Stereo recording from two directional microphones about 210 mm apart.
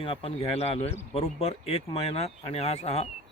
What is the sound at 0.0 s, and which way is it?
Speech, 25° left (ahead or behind).